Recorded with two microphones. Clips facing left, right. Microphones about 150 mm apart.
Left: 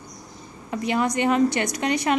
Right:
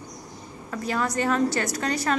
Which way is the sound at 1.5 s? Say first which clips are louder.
Left 3 dB; 15° left (ahead or behind).